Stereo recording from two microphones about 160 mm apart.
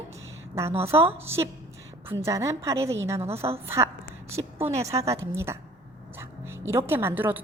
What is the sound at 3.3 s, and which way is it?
Speech, 40° right (ahead or behind).